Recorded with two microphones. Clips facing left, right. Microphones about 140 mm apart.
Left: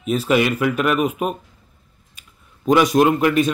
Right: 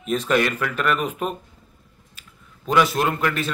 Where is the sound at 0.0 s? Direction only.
5° left (ahead or behind).